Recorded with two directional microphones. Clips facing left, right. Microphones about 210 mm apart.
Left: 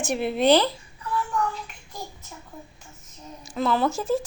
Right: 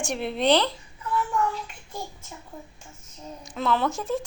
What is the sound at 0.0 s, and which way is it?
Speech, 5° left (ahead or behind).